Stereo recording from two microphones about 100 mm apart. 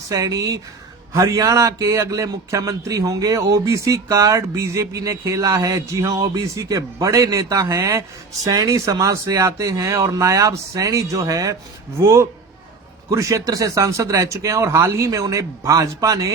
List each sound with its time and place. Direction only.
0.1 s a man's voice: 40° right (ahead or behind)